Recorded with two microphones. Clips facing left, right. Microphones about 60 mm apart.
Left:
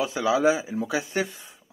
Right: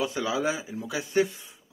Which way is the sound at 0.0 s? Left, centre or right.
Centre.